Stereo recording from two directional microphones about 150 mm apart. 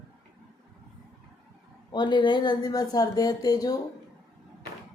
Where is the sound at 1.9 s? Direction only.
30° left (ahead or behind).